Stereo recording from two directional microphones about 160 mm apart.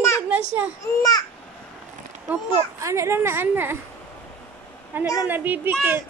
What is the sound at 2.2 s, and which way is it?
A child's voice, 15° right (ahead or behind).